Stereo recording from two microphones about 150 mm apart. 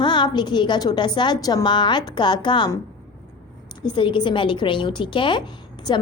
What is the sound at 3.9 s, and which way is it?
A woman's voice, 30° left (ahead or behind).